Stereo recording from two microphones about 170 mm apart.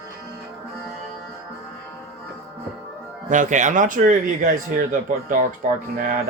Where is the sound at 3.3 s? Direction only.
45° right (ahead or behind).